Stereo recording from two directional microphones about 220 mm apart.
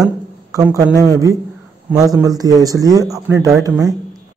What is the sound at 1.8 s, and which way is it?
A man's voice, 15° right (ahead or behind).